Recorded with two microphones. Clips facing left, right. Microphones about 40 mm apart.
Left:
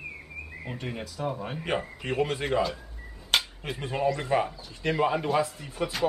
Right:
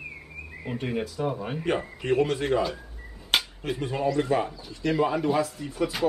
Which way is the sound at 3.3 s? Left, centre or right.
Centre.